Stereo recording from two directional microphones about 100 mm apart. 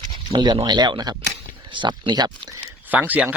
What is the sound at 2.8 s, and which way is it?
Speech, 15° right (ahead or behind).